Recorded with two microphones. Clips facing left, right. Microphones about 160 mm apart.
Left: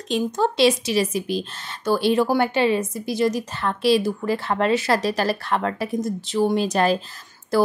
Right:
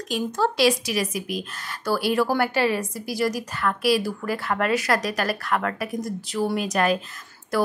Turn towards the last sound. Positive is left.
turn(degrees=30)  # may be behind; listen again after turning